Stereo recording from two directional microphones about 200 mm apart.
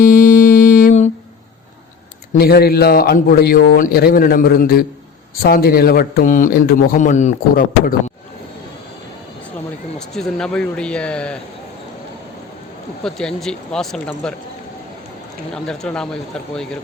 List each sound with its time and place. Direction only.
0.0 s music: 45° left (ahead or behind)
2.3 s a man's voice: 50° left (ahead or behind)
10.2 s speech: 5° left (ahead or behind)
13.0 s speech: 5° left (ahead or behind)
15.5 s speech: 5° left (ahead or behind)